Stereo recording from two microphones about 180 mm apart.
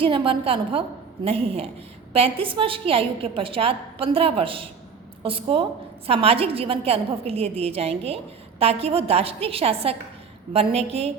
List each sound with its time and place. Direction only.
0.0 s a woman's voice: 30° right (ahead or behind)